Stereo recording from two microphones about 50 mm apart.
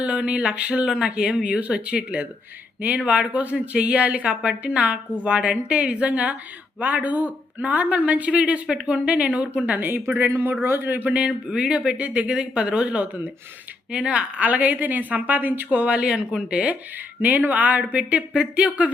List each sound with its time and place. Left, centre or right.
0.0 s a woman's voice: right
9.7 s a man's voice: right
11.1 s a woman's voice: centre; by 15.8 s right
15.8 s a woman's voice: right
16.0 s speech: centre
17.2 s a woman's voice: right